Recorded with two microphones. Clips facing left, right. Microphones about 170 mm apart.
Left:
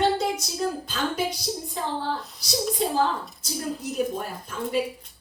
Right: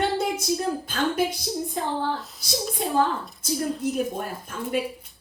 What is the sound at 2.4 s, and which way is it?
Speech, 55° right (ahead or behind).